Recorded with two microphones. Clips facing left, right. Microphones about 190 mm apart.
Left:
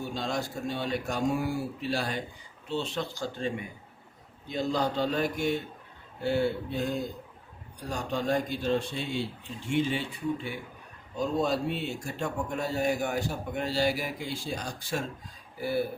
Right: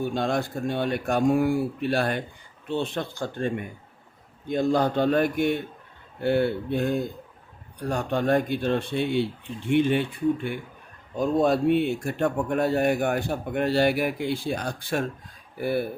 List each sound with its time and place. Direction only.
0.0 s speech: 55° right (ahead or behind)